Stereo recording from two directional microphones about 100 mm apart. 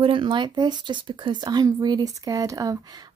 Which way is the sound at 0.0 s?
55° right (ahead or behind).